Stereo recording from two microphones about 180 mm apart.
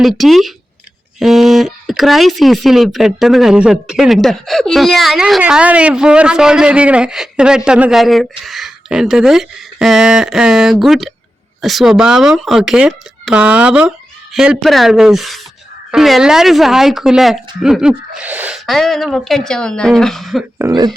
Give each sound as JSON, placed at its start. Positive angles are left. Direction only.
{"t": 0.0, "sound": "speech", "side_deg": 0}
{"t": 20.6, "sound": "speech", "side_deg": -20}